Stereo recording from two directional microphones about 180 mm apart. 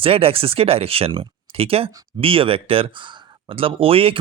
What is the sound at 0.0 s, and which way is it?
Speech, 30° right (ahead or behind).